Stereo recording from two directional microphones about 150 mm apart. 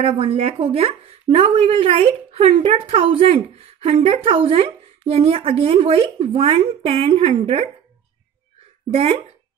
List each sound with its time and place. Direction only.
0.0 s speech: 40° right (ahead or behind)
8.9 s speech: 40° right (ahead or behind)